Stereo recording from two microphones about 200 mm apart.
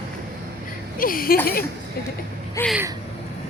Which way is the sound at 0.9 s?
45° left (ahead or behind).